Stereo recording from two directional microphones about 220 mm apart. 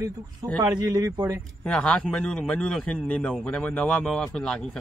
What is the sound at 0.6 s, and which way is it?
Speech, 15° right (ahead or behind).